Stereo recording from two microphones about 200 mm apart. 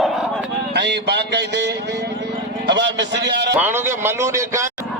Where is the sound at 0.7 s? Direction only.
60° right (ahead or behind).